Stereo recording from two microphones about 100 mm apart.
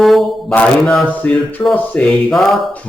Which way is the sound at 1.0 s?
15° left (ahead or behind).